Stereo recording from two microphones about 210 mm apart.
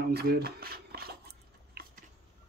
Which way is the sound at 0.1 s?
50° right (ahead or behind).